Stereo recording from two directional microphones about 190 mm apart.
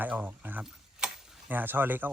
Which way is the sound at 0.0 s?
10° right (ahead or behind).